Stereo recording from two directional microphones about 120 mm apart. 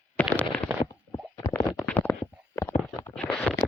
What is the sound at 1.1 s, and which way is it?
Stomach rumble, 15° left (ahead or behind).